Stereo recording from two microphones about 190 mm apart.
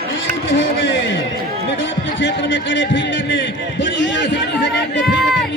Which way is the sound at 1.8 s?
75° left (ahead or behind).